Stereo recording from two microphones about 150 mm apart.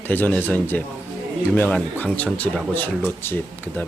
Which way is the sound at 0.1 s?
10° left (ahead or behind).